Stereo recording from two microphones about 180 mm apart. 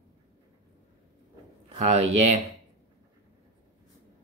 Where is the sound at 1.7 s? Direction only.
35° right (ahead or behind).